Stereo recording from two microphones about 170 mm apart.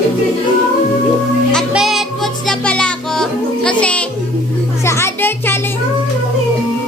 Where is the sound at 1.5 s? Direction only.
Centre (ahead or behind).